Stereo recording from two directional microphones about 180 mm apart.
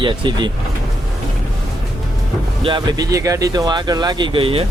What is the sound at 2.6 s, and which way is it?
Speech, 25° right (ahead or behind).